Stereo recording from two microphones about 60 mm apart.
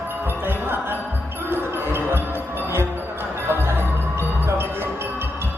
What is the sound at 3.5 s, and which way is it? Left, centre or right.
Music, right.